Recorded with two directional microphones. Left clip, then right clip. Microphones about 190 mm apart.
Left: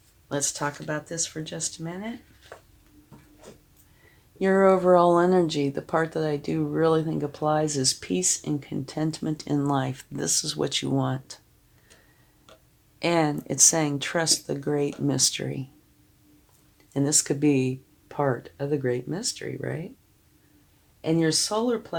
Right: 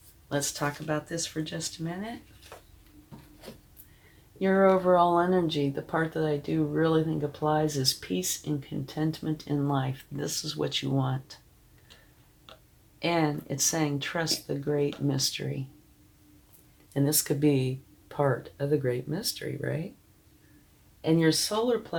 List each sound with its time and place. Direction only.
0.3 s speech: 50° left (ahead or behind)
4.4 s speech: 50° left (ahead or behind)
13.0 s speech: 45° left (ahead or behind)
16.9 s speech: 50° left (ahead or behind)
21.0 s speech: 55° left (ahead or behind)